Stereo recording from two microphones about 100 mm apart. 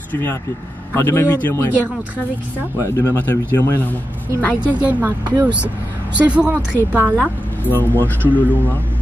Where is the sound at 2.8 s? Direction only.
25° left (ahead or behind).